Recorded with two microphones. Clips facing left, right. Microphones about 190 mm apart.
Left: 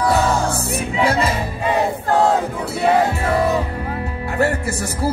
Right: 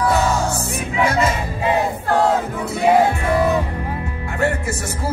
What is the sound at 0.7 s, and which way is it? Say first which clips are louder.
Music: left 1 dB; 35° left (ahead or behind).